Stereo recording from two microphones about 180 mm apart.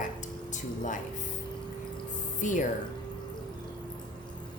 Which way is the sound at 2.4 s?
45° left (ahead or behind).